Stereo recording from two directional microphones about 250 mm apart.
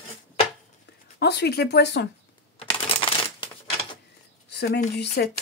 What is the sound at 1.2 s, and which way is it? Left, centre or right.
Speech, left.